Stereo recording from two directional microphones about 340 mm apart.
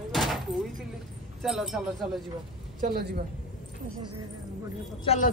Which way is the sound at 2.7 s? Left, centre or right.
Right.